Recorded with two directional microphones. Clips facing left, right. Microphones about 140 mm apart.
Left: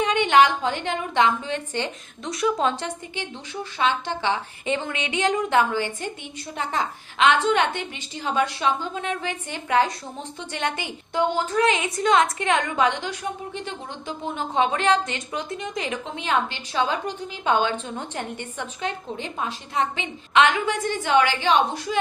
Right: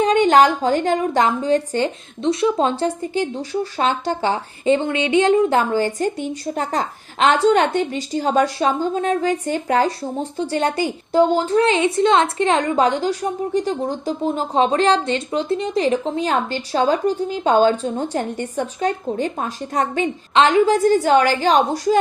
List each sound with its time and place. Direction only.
0.0 s a woman's voice: 35° right (ahead or behind)